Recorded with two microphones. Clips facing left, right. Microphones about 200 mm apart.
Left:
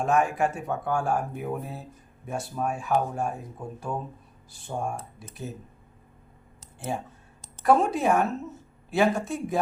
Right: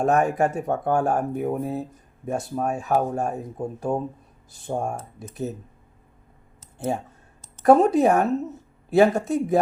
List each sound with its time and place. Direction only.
0.0 s speech: 40° right (ahead or behind)
6.7 s speech: 40° right (ahead or behind)